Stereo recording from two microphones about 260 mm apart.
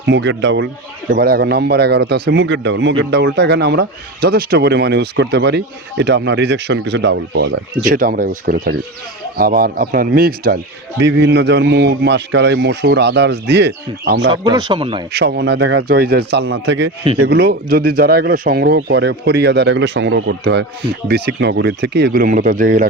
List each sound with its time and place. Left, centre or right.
0.1 s speech: right
14.3 s speech: centre
15.1 s speech: right